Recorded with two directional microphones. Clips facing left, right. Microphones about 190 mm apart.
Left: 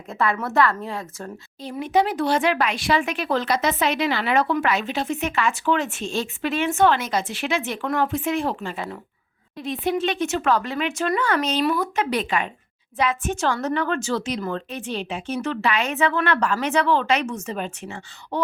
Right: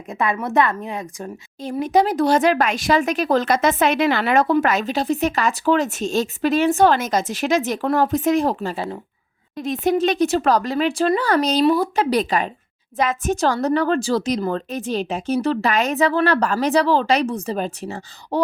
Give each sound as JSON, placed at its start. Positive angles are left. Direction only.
{"t": 0.1, "sound": "a woman's voice", "side_deg": -15}
{"t": 1.7, "sound": "a woman's voice", "side_deg": -40}
{"t": 9.6, "sound": "a woman's voice", "side_deg": -45}